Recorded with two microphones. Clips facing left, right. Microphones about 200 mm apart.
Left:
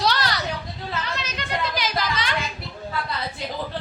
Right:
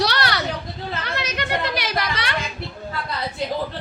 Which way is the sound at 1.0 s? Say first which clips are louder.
Right 4 dB; 65° right (ahead or behind).